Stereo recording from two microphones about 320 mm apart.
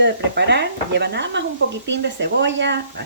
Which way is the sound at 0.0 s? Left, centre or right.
Right.